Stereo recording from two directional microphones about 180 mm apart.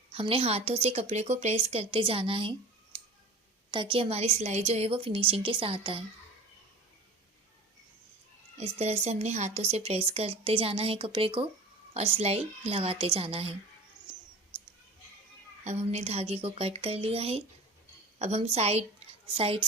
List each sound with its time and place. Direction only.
0.1 s a woman's voice: 30° right (ahead or behind)
3.7 s a woman's voice: 25° right (ahead or behind)
8.5 s a woman's voice: 35° right (ahead or behind)
14.1 s mouse: 25° right (ahead or behind)
15.6 s a woman's voice: 40° right (ahead or behind)